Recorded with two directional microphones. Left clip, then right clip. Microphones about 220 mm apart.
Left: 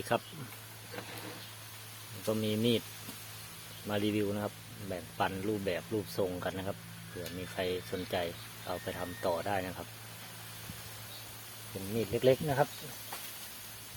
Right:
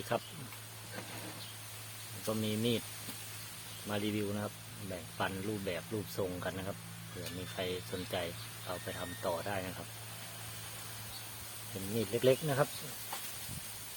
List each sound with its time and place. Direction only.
0.1 s speech: 25° left (ahead or behind)
2.2 s speech: 20° left (ahead or behind)
3.8 s speech: 20° left (ahead or behind)
11.9 s speech: 10° left (ahead or behind)